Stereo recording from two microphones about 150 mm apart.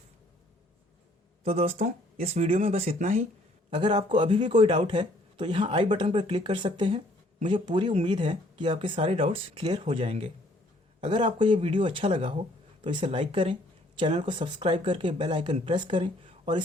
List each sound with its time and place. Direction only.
1.5 s speech: 45° right (ahead or behind)
3.8 s speech: 35° right (ahead or behind)